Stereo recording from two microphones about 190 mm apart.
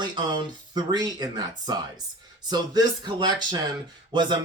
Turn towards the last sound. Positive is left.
turn(degrees=-25)  # may be behind; listen again after turning